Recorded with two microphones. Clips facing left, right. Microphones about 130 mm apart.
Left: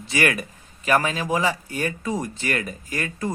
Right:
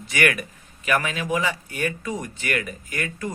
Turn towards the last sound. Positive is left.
turn(degrees=30)  # may be behind; listen again after turning